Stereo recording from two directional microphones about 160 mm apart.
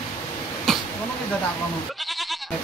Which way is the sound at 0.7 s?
Centre (ahead or behind).